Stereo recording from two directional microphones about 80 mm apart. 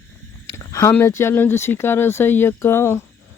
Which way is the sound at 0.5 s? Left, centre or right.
Left.